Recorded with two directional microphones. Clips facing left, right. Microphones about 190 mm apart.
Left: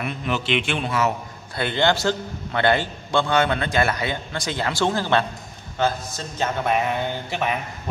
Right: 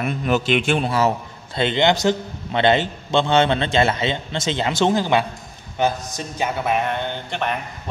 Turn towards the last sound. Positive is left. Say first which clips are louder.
# even
turn(degrees=5)  # may be behind; listen again after turning